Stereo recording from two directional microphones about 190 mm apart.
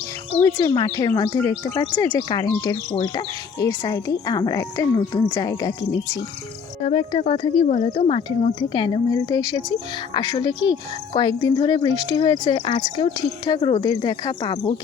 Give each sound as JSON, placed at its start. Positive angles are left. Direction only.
{"t": 0.3, "sound": "speech", "side_deg": 15}
{"t": 6.8, "sound": "speech", "side_deg": 30}